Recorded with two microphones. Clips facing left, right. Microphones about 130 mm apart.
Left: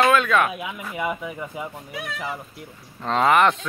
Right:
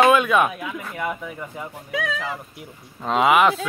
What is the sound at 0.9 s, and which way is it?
Speech, 5° left (ahead or behind).